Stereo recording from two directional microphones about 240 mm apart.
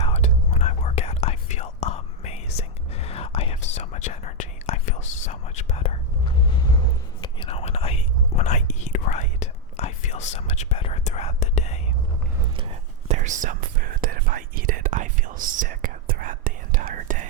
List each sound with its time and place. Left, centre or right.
0.0 s whispering: left
7.2 s whispering: left
13.1 s whispering: right